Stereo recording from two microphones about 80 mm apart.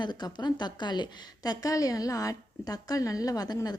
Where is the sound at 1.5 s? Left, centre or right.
Left.